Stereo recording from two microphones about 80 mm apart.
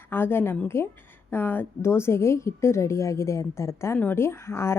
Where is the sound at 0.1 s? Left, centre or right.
Left.